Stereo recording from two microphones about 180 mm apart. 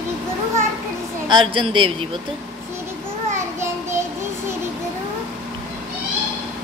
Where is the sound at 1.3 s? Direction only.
25° right (ahead or behind).